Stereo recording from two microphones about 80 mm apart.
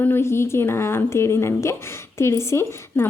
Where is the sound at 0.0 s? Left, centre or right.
Left.